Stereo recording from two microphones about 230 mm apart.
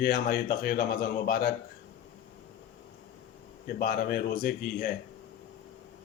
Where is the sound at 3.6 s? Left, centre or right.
Left.